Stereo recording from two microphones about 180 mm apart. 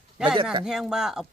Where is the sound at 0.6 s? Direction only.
5° right (ahead or behind).